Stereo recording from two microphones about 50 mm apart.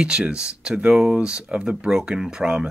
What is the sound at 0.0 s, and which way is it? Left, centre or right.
Speech, centre.